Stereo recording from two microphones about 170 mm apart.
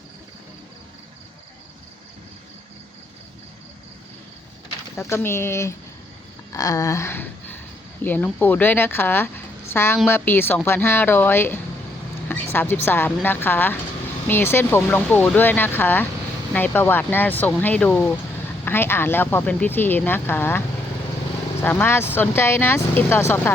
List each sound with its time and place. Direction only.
4.9 s speech: 15° left (ahead or behind)
6.5 s a sound: 20° left (ahead or behind)
8.0 s speech: 10° left (ahead or behind)